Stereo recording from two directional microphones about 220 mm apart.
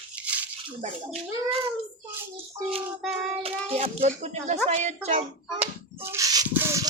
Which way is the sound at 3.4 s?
25° right (ahead or behind).